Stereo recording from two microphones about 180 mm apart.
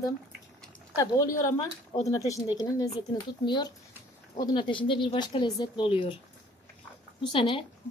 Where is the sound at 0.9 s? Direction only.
20° left (ahead or behind).